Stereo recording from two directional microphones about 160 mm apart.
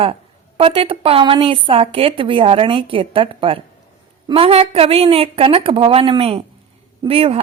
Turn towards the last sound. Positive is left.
turn(degrees=-35)  # may be behind; listen again after turning